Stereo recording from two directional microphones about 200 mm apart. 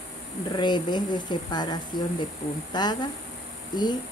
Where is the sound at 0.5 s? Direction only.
20° left (ahead or behind).